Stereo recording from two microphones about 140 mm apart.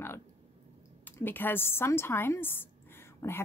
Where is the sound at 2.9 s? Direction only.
15° left (ahead or behind).